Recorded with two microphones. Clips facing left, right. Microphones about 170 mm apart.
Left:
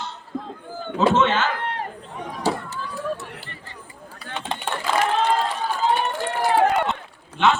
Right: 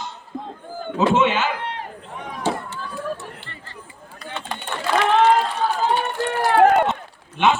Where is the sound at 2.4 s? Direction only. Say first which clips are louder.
Even; 40° left (ahead or behind).